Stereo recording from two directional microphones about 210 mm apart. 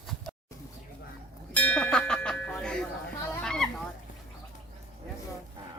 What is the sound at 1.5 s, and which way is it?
Music, 5° left (ahead or behind).